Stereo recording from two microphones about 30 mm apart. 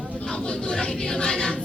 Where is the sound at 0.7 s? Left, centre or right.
Left.